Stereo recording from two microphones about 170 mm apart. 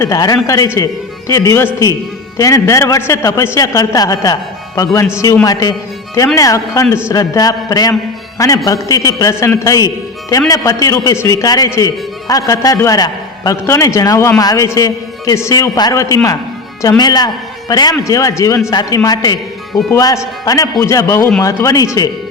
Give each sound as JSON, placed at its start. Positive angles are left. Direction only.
{"t": 0.0, "sound": "a man's voice", "side_deg": 20}